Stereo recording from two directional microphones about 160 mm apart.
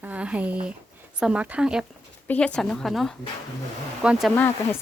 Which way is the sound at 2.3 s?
5° left (ahead or behind).